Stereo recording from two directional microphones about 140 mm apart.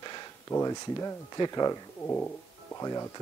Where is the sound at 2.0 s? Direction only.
15° left (ahead or behind).